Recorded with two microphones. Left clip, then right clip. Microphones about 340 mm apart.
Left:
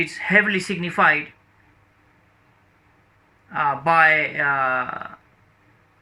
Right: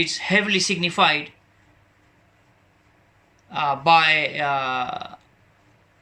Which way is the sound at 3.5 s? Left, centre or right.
Centre.